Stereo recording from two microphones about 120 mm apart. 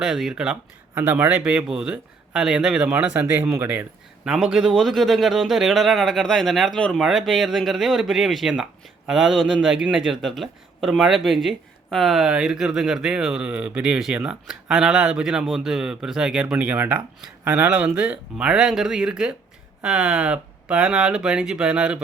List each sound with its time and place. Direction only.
0.0 s speech: centre (ahead or behind)
4.3 s speech: 5° right (ahead or behind)